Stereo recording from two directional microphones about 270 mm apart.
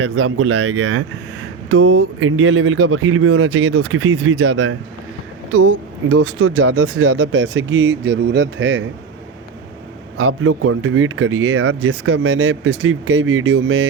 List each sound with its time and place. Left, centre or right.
0.0 s speech: right
10.2 s speech: right